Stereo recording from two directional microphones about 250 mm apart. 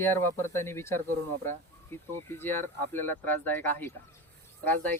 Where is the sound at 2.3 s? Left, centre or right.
Centre.